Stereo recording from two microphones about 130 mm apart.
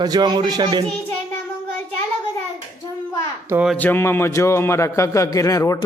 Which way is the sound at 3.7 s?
15° left (ahead or behind).